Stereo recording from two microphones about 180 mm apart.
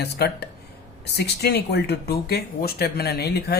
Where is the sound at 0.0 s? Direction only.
65° left (ahead or behind).